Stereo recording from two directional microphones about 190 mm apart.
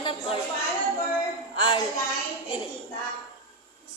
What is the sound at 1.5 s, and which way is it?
Speech, 25° left (ahead or behind).